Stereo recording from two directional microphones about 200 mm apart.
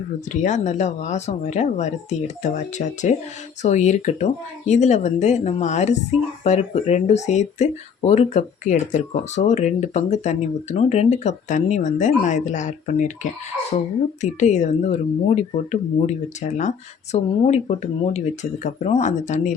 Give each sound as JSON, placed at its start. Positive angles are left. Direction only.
{"t": 0.3, "sound": "speech", "side_deg": 35}